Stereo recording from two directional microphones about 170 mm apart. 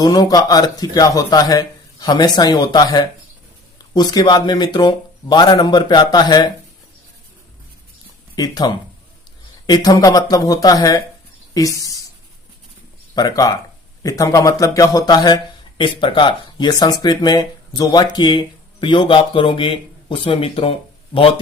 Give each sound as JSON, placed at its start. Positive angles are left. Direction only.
{"t": 0.0, "sound": "speech", "side_deg": 20}
{"t": 8.4, "sound": "speech", "side_deg": 20}
{"t": 13.1, "sound": "speech", "side_deg": 20}